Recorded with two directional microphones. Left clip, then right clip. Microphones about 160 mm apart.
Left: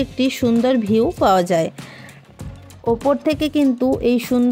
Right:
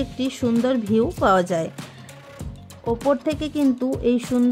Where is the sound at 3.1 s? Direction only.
35° left (ahead or behind).